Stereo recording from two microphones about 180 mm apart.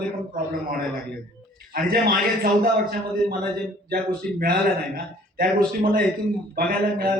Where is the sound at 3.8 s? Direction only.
55° right (ahead or behind).